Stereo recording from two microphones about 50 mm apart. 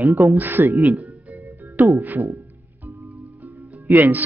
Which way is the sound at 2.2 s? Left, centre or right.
Right.